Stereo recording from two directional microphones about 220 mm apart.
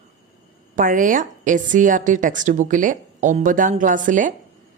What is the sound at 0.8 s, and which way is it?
A woman's voice, 35° right (ahead or behind).